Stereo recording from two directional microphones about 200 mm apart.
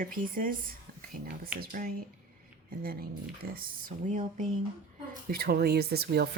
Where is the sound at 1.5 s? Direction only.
45° right (ahead or behind).